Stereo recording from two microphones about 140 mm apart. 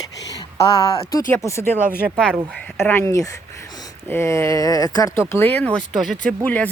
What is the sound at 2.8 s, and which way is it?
Speech, 15° left (ahead or behind).